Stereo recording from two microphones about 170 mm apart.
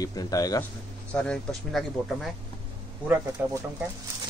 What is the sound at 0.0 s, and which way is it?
Speech, 20° left (ahead or behind).